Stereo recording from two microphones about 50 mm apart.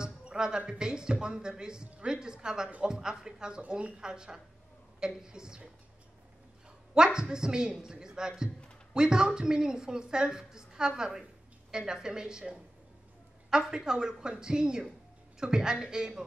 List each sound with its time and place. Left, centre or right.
0.0 s a woman's voice: centre
6.9 s a woman's voice: centre